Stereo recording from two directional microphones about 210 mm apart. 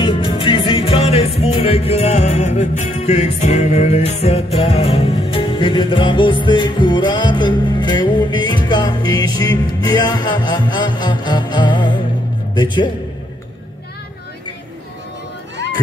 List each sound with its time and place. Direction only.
0.0 s music: 25° left (ahead or behind)
12.5 s a man's voice: 20° left (ahead or behind)